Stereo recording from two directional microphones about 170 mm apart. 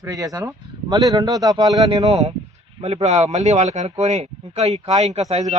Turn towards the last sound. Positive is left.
turn(degrees=-40)  # may be behind; listen again after turning